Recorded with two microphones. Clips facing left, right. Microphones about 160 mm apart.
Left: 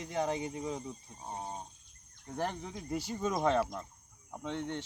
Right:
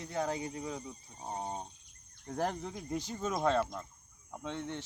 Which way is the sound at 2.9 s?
10° left (ahead or behind).